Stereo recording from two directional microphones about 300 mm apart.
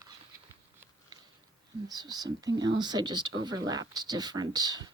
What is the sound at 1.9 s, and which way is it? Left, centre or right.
A woman's voice, centre.